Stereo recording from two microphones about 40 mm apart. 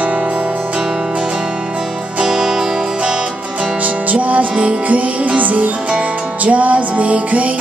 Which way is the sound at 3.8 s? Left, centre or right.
Right.